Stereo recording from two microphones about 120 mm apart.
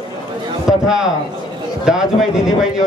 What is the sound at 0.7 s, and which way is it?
A man's voice, 5° right (ahead or behind).